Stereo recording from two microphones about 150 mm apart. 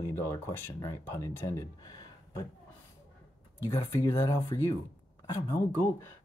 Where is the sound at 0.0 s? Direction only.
20° left (ahead or behind).